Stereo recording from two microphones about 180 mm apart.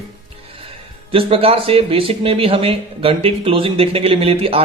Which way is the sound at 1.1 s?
30° right (ahead or behind).